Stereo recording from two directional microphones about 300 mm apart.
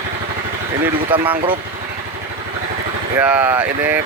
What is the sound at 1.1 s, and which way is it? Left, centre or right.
Speech, centre.